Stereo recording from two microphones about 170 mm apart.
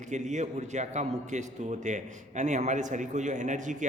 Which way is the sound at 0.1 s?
45° right (ahead or behind).